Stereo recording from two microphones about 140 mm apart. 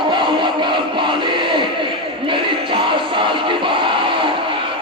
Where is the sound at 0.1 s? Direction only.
35° right (ahead or behind).